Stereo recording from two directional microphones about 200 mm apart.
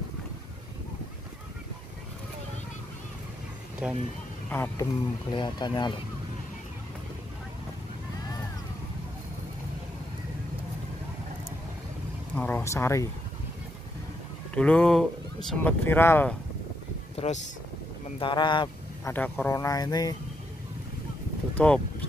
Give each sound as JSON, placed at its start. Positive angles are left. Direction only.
{"t": 3.8, "sound": "speech", "side_deg": -5}
{"t": 4.5, "sound": "speech", "side_deg": 10}
{"t": 5.3, "sound": "speech", "side_deg": 20}
{"t": 12.4, "sound": "speech", "side_deg": 10}
{"t": 14.5, "sound": "speech", "side_deg": 5}
{"t": 17.1, "sound": "speech", "side_deg": 30}
{"t": 19.1, "sound": "speech", "side_deg": 10}
{"t": 21.5, "sound": "speech", "side_deg": 5}